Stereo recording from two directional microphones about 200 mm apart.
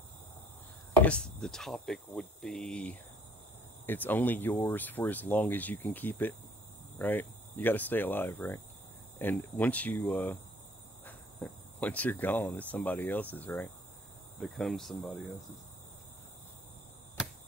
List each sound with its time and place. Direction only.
1.0 s speech: 5° left (ahead or behind)